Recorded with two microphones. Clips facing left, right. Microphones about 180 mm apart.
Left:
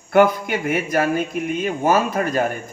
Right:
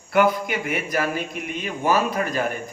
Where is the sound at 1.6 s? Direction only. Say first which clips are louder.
Left 2 dB; 45° left (ahead or behind).